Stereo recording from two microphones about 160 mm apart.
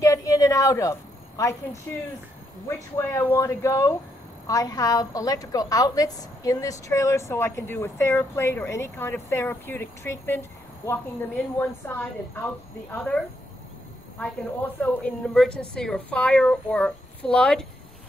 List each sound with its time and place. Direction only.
0.0 s a sound: 20° left (ahead or behind)
2.7 s a woman's voice: 15° left (ahead or behind)
14.2 s a woman's voice: 10° left (ahead or behind)